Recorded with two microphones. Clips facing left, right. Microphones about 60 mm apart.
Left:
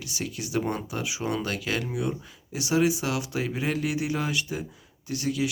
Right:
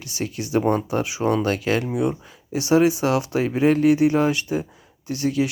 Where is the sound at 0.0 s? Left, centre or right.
Right.